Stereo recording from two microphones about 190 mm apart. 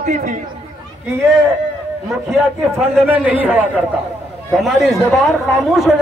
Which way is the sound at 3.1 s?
10° right (ahead or behind).